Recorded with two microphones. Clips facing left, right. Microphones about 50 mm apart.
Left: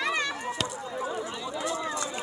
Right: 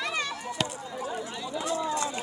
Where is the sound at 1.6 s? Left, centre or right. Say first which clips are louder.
Right 3 dB; left.